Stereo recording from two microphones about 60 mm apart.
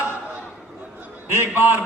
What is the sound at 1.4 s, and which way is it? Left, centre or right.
Music, right.